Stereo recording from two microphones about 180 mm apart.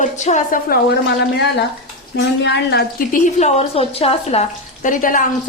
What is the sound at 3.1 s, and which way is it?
Speech, 40° left (ahead or behind).